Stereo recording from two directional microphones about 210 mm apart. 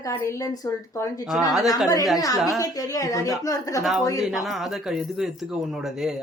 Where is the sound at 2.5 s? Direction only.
15° left (ahead or behind).